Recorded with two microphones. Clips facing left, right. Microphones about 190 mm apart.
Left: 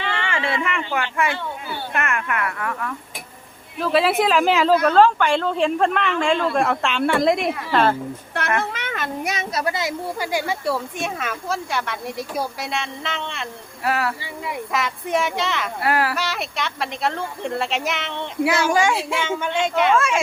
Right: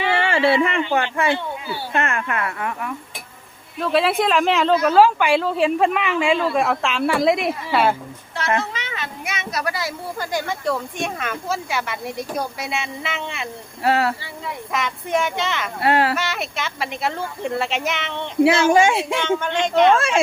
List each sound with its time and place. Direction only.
0.2 s a sound: 35° right (ahead or behind)
0.9 s speech: 20° right (ahead or behind)
1.1 s speech: 30° right (ahead or behind)
3.8 s speech: centre (ahead or behind)
8.7 s a sound: 55° left (ahead or behind)
9.3 s speech: 30° left (ahead or behind)
10.2 s speech: 10° left (ahead or behind); by 13.5 s 10° right (ahead or behind)
13.8 s speech: 30° right (ahead or behind)
14.7 s speech: centre (ahead or behind)
15.8 s speech: 25° right (ahead or behind)
16.1 s speech: centre (ahead or behind)
18.7 s speech: 25° right (ahead or behind)
19.2 s speech: 10° left (ahead or behind)
20.0 s speech: 30° right (ahead or behind)